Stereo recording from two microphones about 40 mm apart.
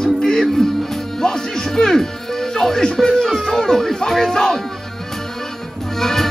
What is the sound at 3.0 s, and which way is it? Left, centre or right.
Speech, centre.